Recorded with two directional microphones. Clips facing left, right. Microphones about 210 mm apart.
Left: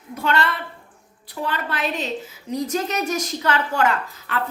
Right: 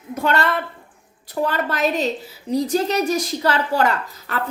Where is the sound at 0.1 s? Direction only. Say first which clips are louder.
Right 3 dB; 45° right (ahead or behind).